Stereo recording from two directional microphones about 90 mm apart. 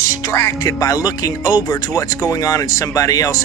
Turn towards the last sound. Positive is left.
turn(degrees=40)  # may be behind; listen again after turning